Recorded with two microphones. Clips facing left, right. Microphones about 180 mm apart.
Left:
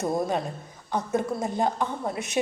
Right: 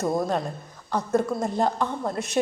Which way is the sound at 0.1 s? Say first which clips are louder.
Right 1 dB; 5° left (ahead or behind).